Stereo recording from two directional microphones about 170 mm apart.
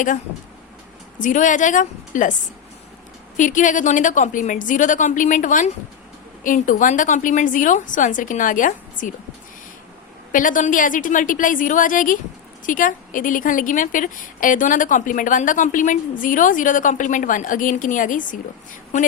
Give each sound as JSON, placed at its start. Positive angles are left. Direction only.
{"t": 1.2, "sound": "a woman's voice", "side_deg": 50}
{"t": 3.3, "sound": "a woman's voice", "side_deg": 50}
{"t": 10.3, "sound": "a woman's voice", "side_deg": 50}